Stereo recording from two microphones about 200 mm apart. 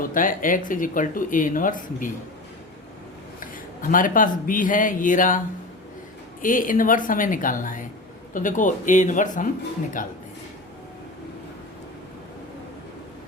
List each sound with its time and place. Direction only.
0.0 s speech: 40° left (ahead or behind)
3.4 s speech: 40° left (ahead or behind)
6.4 s a woman's voice: 40° left (ahead or behind)